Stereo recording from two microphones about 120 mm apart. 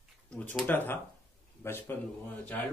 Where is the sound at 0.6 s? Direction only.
15° left (ahead or behind).